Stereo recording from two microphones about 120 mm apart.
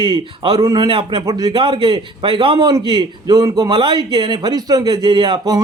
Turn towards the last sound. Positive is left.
turn(degrees=-35)  # may be behind; listen again after turning